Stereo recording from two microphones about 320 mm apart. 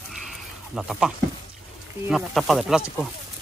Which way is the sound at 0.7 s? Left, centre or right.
Centre.